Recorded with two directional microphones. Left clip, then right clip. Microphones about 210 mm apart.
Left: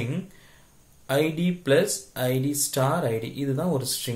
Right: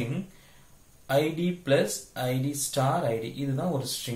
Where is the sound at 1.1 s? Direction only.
45° left (ahead or behind).